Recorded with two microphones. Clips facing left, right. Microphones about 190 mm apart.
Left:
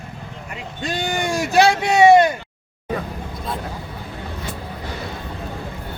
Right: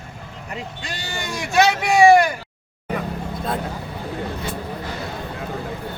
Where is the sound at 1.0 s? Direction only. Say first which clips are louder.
Left 6 dB; 45° left (ahead or behind); by 2.3 s 25° left (ahead or behind).